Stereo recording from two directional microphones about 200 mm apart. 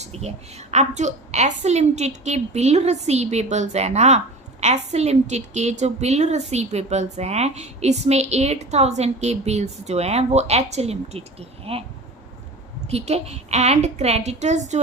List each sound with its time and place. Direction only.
0.0 s a woman's voice: 30° right (ahead or behind)
12.9 s a woman's voice: 30° right (ahead or behind)